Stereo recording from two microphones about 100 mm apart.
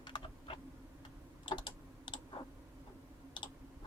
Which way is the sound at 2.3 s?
70° left (ahead or behind).